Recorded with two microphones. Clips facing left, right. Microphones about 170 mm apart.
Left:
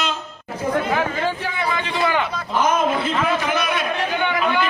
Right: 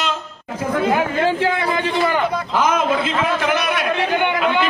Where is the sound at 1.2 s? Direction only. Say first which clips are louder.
Right 6 dB; 90° right.